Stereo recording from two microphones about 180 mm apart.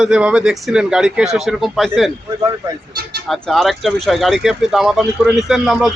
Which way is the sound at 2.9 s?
60° right (ahead or behind).